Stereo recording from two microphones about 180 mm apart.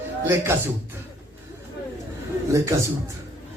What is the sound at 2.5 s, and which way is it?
Speech, 15° right (ahead or behind).